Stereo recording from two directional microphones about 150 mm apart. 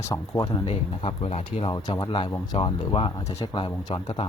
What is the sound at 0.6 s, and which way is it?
Speech, 40° left (ahead or behind).